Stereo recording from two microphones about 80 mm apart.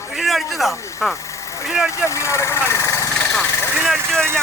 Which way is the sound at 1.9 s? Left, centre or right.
Left.